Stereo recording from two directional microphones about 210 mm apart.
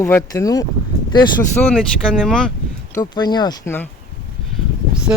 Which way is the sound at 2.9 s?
20° left (ahead or behind).